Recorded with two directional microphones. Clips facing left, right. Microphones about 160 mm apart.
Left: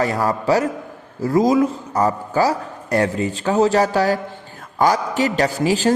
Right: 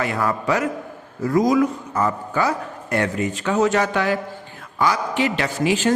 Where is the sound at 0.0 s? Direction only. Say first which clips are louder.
Left 3 dB; 35° left (ahead or behind).